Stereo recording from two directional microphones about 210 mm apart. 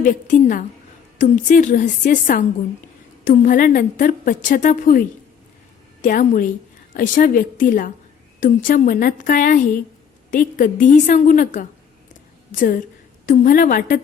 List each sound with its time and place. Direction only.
0.0 s a woman's voice: 40° left (ahead or behind)